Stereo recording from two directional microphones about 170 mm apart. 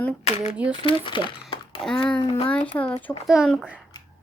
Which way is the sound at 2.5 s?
10° left (ahead or behind).